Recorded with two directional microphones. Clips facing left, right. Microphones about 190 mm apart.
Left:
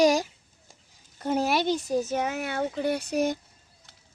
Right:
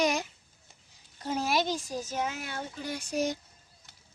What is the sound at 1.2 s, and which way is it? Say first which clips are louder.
Speech: left 4 dB; 55° left (ahead or behind).